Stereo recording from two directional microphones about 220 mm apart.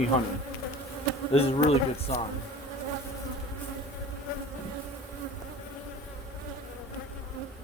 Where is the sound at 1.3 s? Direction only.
25° left (ahead or behind).